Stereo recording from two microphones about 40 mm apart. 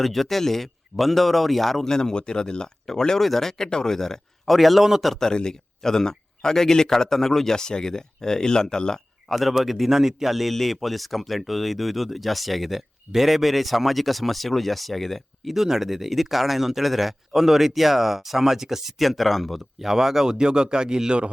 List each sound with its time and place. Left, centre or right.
0.0 s speech: centre
4.8 s speech: centre
5.0 s speech: centre
5.3 s speech: centre
9.3 s speech: centre
15.5 s speech: centre
19.9 s speech: centre